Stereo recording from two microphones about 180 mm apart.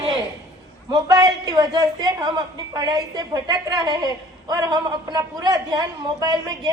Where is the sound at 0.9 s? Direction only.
20° right (ahead or behind).